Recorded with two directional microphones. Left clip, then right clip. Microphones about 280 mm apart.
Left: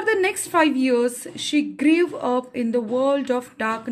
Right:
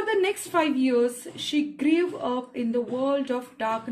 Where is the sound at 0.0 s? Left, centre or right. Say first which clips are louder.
Left 4 dB; left.